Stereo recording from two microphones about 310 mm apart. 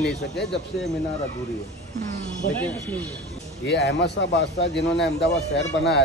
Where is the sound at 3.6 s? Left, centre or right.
Left.